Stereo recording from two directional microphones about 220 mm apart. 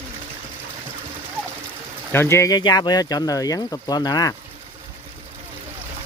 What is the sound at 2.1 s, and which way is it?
Speech, 10° left (ahead or behind).